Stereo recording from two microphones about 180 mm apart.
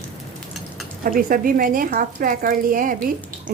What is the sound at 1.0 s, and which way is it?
Speech, 50° right (ahead or behind).